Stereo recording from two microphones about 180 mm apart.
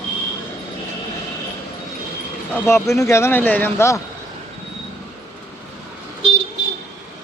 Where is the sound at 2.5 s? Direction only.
15° left (ahead or behind).